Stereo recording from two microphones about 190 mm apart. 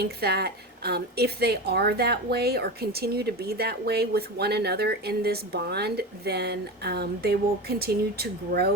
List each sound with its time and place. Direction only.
0.0 s a woman's voice: 55° right (ahead or behind)